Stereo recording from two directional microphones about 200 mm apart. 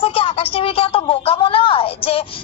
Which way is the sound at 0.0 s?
30° left (ahead or behind).